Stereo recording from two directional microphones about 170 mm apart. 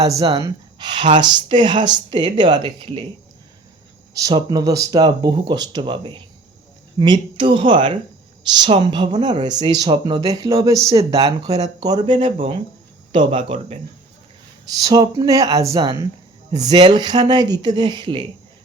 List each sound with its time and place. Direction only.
0.0 s speech: 20° right (ahead or behind)
4.1 s speech: 20° right (ahead or behind)
14.7 s speech: 20° right (ahead or behind)